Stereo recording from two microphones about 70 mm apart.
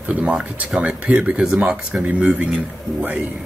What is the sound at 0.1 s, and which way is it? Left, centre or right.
Speech, centre.